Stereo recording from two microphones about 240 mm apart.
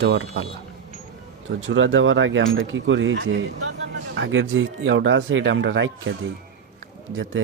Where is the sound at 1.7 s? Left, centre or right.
Right.